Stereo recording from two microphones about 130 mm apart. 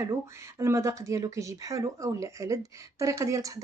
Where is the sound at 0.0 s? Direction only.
20° right (ahead or behind).